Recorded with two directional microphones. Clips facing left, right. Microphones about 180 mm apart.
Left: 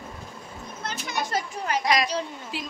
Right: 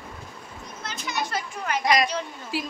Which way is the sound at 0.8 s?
50° left (ahead or behind).